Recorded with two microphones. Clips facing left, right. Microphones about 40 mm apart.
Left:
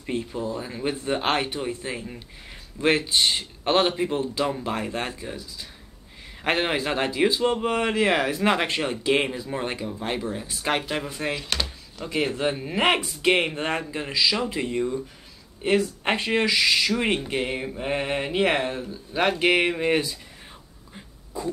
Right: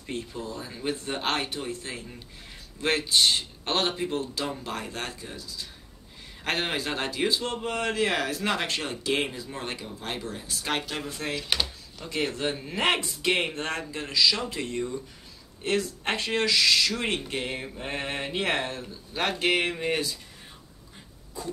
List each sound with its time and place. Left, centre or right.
0.0 s a man's voice: left
11.6 s a sound: centre
12.4 s a man's voice: centre